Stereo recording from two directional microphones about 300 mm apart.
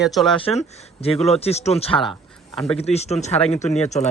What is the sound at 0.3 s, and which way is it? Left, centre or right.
Speech, centre.